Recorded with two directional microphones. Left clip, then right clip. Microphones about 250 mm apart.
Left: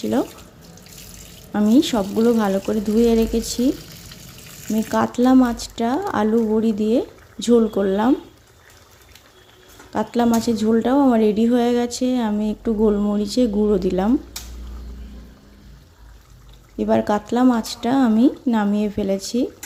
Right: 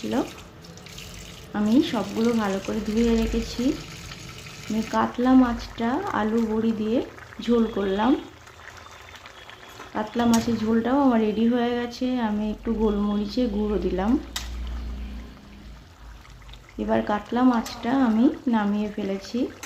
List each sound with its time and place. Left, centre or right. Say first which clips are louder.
1.5 s speech: left 5 dB; left
4.9 s speech: left 4 dB; left
9.9 s speech: left 4 dB; left
16.7 s speech: left 5 dB; left